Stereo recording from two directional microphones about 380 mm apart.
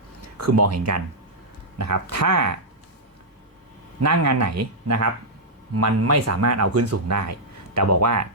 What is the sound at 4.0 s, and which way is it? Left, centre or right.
Speech, right.